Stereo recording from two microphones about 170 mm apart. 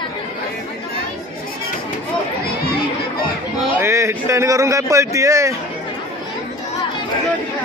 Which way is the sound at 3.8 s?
15° right (ahead or behind).